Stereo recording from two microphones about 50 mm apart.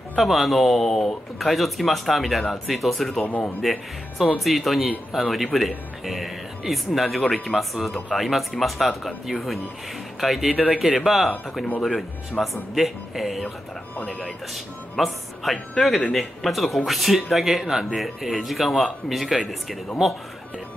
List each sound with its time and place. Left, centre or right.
0.1 s speech: centre
3.3 s a man's voice: left
4.4 s speech: centre